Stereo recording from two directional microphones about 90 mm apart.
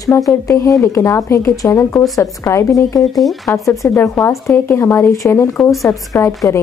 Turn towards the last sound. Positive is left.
turn(degrees=30)  # may be behind; listen again after turning